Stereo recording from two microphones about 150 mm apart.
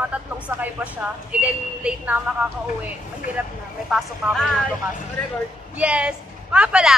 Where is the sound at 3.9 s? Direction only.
Centre (ahead or behind).